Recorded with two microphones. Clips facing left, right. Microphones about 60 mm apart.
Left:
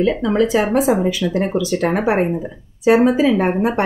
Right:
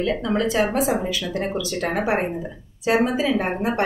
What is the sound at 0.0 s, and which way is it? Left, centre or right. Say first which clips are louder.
Speech: left 6 dB; left.